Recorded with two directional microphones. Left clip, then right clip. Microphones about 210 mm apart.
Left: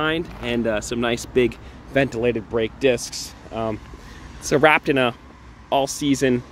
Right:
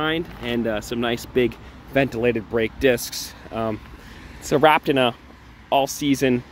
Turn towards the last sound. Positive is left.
turn(degrees=-10)  # may be behind; listen again after turning